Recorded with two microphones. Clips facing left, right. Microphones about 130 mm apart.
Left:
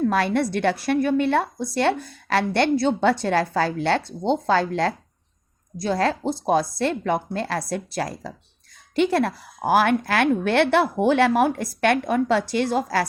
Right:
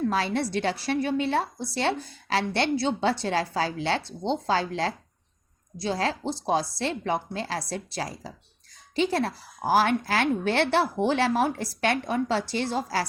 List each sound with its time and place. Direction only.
0.0 s a woman's voice: 55° left (ahead or behind)